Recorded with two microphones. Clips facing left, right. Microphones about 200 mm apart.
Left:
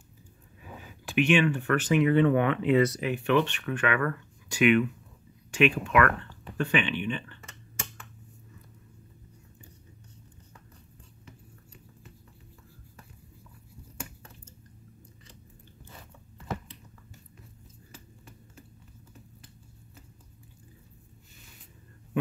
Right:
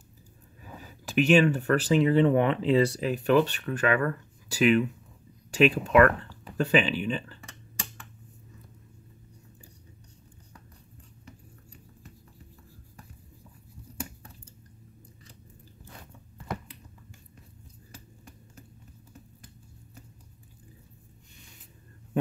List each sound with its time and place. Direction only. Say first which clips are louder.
0.7 s speech: right 1 dB; 40° right (ahead or behind)